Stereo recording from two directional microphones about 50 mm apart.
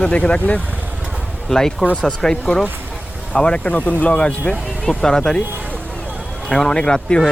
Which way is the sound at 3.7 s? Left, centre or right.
Left.